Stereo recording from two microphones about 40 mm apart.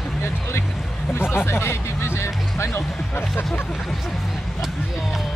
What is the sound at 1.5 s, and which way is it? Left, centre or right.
Music, left.